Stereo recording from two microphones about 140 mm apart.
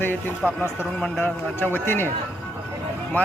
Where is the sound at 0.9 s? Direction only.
10° left (ahead or behind).